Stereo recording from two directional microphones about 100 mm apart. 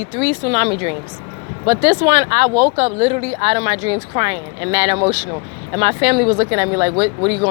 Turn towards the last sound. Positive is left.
turn(degrees=-55)  # may be behind; listen again after turning